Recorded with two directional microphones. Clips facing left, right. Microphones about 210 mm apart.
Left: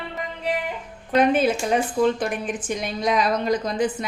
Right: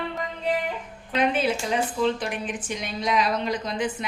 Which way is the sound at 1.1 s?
45° left (ahead or behind).